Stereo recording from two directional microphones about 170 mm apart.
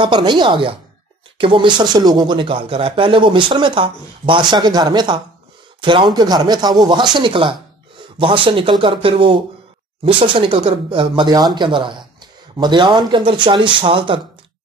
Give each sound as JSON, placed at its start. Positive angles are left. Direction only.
{"t": 0.0, "sound": "speech", "side_deg": -25}